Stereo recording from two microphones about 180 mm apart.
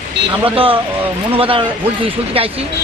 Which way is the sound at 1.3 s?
30° right (ahead or behind).